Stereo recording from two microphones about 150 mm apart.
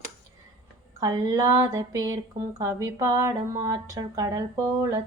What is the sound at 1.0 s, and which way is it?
Female singing, 25° right (ahead or behind).